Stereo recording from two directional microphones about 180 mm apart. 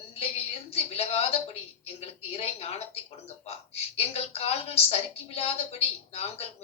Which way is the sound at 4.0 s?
35° left (ahead or behind).